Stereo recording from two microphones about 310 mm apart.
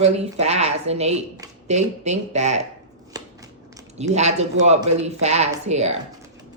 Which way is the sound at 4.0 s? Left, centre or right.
Right.